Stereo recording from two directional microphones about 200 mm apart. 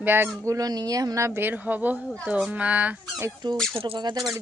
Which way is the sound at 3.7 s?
25° right (ahead or behind).